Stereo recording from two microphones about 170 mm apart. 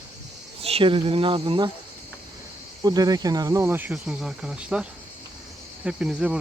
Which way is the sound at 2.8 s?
20° right (ahead or behind).